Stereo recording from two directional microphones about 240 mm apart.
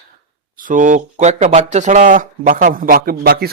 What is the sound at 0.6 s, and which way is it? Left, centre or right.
Speech, right.